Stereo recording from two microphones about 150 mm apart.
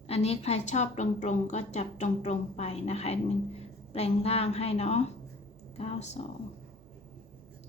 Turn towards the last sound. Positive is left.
turn(degrees=45)  # may be behind; listen again after turning